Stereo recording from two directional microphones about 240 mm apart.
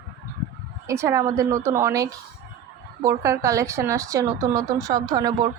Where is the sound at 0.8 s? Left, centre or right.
Centre.